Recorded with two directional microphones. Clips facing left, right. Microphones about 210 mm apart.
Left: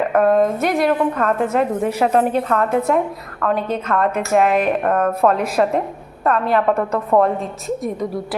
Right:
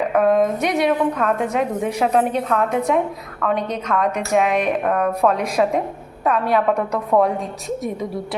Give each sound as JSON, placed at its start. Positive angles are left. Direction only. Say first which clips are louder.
{"t": 0.1, "sound": "a woman's voice", "louder": "left 1 dB", "side_deg": 0}